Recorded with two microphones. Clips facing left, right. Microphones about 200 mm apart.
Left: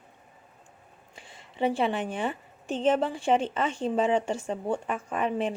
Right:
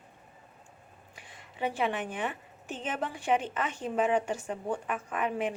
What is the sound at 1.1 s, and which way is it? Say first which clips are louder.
A woman's voice: left 7 dB; 25° left (ahead or behind).